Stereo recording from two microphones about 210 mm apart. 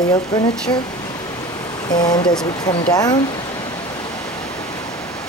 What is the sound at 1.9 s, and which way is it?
Speech, 20° left (ahead or behind).